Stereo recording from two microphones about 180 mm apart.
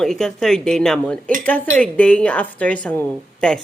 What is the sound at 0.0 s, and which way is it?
A woman's voice, 5° left (ahead or behind).